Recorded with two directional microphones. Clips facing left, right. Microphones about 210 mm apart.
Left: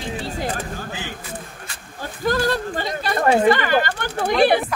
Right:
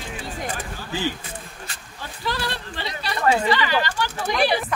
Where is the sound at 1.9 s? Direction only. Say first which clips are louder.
Left 8 dB; 45° left (ahead or behind).